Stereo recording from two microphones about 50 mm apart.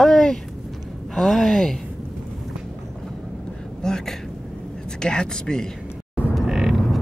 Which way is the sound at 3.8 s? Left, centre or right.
Centre.